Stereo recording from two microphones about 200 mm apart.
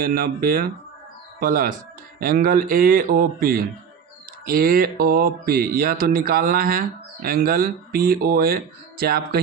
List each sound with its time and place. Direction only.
0.0 s mantra: 45° right (ahead or behind)